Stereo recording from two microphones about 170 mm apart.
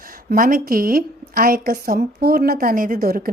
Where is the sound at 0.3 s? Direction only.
55° right (ahead or behind).